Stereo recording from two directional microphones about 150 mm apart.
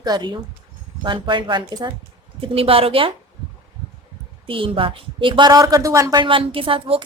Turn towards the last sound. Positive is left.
turn(degrees=-35)  # may be behind; listen again after turning